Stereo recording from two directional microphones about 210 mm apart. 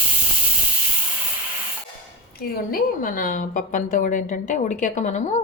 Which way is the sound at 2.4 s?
45° left (ahead or behind).